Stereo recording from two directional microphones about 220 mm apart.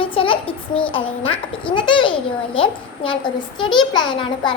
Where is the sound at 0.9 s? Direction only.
25° left (ahead or behind).